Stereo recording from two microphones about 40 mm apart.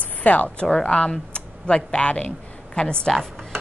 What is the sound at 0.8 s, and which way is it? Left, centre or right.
A woman's voice, left.